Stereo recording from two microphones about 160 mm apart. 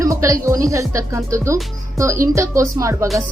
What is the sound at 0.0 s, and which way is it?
A child's voice, 20° right (ahead or behind).